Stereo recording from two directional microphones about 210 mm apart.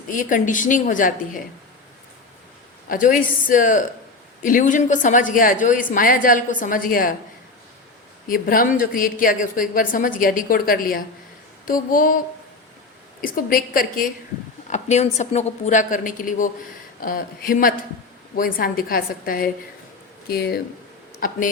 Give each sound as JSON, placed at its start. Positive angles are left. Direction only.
{"t": 0.1, "sound": "speech", "side_deg": 40}
{"t": 2.9, "sound": "speech", "side_deg": 40}
{"t": 8.3, "sound": "speech", "side_deg": 40}
{"t": 13.2, "sound": "a woman's voice", "side_deg": 40}
{"t": 14.7, "sound": "a woman's voice", "side_deg": 35}